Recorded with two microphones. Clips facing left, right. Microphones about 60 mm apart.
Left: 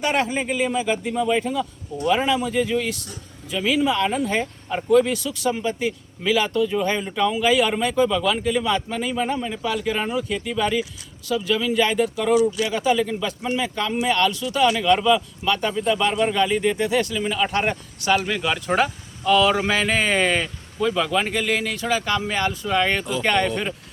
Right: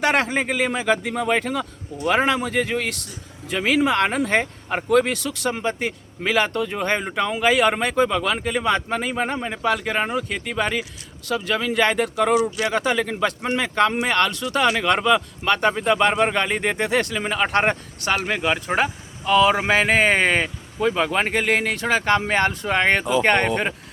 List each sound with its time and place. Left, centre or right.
0.0 s a man's voice: right